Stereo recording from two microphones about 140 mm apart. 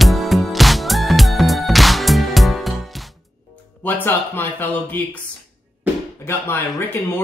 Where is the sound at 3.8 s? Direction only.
15° left (ahead or behind).